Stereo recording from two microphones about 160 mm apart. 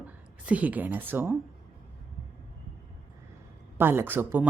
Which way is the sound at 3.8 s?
15° right (ahead or behind).